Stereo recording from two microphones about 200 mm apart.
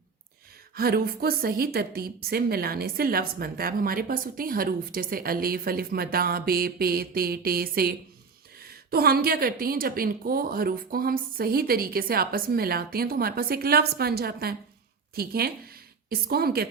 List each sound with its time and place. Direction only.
0.8 s a woman's voice: 50° right (ahead or behind)